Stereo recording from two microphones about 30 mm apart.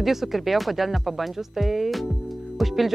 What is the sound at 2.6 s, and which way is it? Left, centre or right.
Music, centre.